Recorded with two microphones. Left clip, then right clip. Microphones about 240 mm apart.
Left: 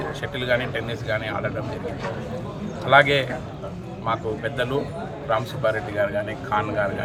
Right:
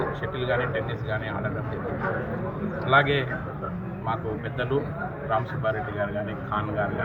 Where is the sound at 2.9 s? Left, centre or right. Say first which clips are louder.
Left 5 dB; left.